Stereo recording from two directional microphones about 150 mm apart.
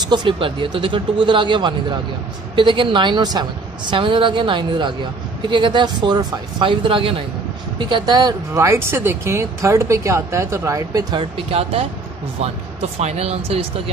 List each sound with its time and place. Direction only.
0.1 s a woman's voice: 30° right (ahead or behind)
13.0 s speech: 45° right (ahead or behind)